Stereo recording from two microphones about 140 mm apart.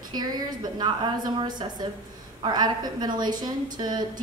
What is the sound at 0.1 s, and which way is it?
A woman's voice, 30° right (ahead or behind).